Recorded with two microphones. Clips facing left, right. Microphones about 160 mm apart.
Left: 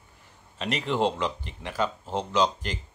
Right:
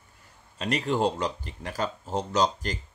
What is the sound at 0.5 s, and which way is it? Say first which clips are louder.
Speech: right 1 dB; 40° right (ahead or behind).